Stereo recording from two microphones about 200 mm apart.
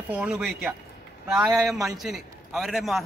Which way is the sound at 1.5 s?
15° right (ahead or behind).